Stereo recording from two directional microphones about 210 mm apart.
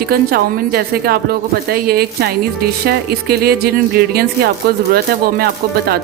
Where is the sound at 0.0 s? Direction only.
45° right (ahead or behind).